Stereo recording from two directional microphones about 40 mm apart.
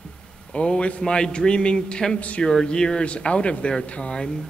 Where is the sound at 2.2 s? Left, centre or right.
Left.